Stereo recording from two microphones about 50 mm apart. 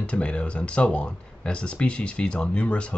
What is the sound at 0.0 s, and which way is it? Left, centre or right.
Speech, left.